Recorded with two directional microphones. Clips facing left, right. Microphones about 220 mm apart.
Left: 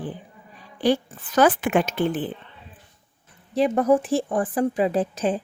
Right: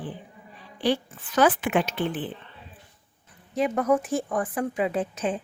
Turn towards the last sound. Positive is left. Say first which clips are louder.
# left 4 dB
turn(degrees=35)  # may be behind; listen again after turning